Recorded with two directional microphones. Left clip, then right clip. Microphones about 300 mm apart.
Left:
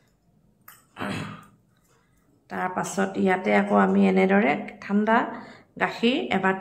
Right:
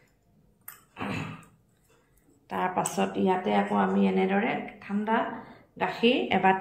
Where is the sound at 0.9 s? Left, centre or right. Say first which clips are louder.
Left 3 dB; centre.